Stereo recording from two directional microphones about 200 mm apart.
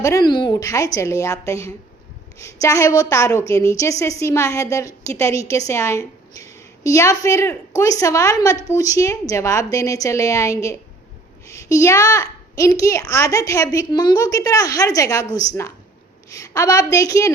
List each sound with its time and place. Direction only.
0.0 s a woman's voice: 15° left (ahead or behind)